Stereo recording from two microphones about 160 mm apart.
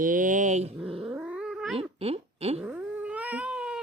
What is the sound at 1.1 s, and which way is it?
Cat, 10° right (ahead or behind).